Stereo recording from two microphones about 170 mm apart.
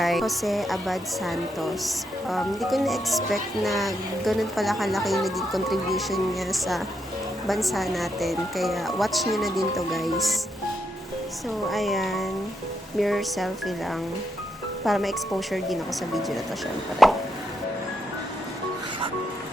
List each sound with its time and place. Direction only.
0.0 s a woman's voice: centre (ahead or behind)
11.7 s a woman's voice: centre (ahead or behind)